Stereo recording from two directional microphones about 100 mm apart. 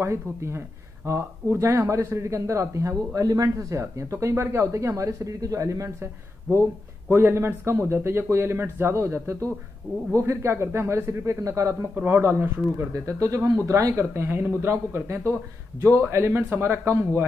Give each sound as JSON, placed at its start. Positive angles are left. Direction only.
{"t": 0.0, "sound": "speech", "side_deg": -30}